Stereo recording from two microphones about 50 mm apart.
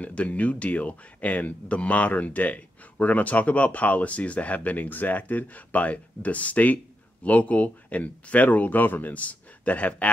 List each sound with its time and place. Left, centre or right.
0.0 s speech: left